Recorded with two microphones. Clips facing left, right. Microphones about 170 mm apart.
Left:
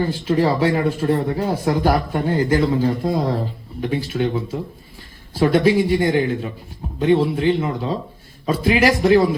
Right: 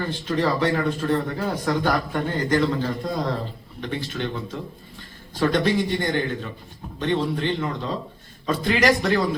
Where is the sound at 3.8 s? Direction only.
10° left (ahead or behind).